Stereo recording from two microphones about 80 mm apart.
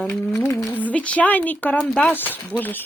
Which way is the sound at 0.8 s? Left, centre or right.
Centre.